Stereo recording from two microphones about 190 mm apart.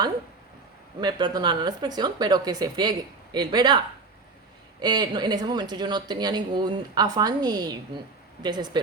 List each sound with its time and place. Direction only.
1.0 s a woman's voice: 25° right (ahead or behind)
4.8 s a woman's voice: 20° right (ahead or behind)